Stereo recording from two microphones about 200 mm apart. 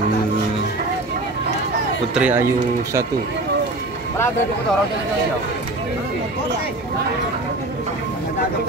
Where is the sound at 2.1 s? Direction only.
5° right (ahead or behind).